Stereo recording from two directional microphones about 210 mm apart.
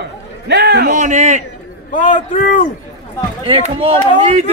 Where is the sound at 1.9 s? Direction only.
40° left (ahead or behind).